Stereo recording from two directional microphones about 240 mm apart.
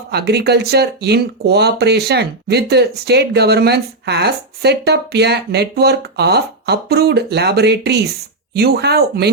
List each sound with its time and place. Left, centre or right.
0.1 s speech: right